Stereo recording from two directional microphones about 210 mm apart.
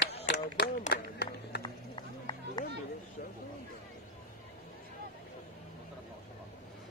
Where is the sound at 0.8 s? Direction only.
50° left (ahead or behind).